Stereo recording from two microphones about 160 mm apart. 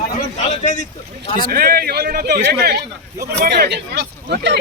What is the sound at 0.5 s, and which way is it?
Speech, 50° left (ahead or behind).